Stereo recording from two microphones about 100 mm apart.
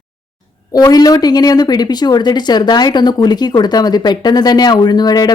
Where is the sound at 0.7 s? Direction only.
40° left (ahead or behind).